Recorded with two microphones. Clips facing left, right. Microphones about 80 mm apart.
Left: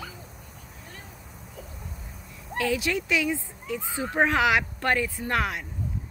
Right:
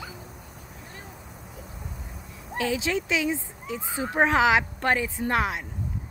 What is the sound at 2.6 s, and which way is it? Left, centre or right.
Speech, right.